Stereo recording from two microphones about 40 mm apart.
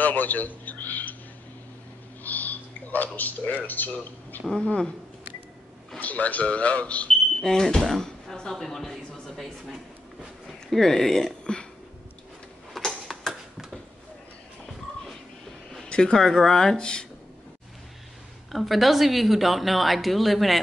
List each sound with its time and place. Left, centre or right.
0.0 s a sound: left
2.2 s a sound: left
3.6 s speech: left
4.6 s speech: left
5.9 s speech: left
7.4 s speech: centre
8.9 s a woman's voice: centre
10.7 s speech: centre
12.7 s tick-tock: centre
13.3 s a sound: centre
15.7 s a sound: centre
16.2 s speech: centre
18.5 s a woman's voice: centre